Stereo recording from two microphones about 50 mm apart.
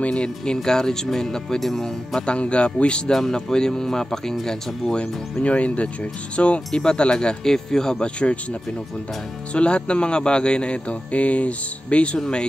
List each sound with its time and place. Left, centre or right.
0.1 s speech: centre
2.2 s speech: left
3.1 s speech: centre
5.0 s speech: left